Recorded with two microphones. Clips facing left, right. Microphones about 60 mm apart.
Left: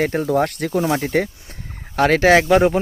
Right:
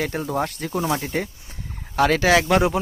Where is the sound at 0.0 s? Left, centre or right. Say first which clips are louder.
Left 6 dB; left.